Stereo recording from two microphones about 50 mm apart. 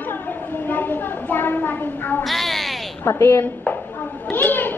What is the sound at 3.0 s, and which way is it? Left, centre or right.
Speech, left.